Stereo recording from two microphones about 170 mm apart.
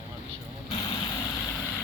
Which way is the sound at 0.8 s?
20° left (ahead or behind).